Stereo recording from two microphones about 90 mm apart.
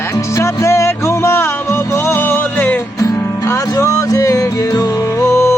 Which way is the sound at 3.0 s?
40° left (ahead or behind).